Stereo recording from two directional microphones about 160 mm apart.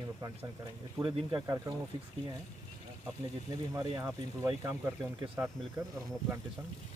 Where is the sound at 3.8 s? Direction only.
20° right (ahead or behind).